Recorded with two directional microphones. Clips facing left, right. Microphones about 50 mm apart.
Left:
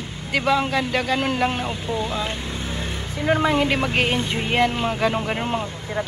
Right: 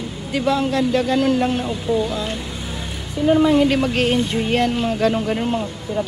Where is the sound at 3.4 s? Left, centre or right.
Left.